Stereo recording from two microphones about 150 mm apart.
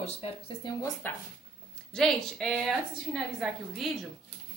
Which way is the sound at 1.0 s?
15° left (ahead or behind).